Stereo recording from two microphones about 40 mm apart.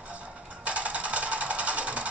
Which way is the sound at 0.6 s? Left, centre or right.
Right.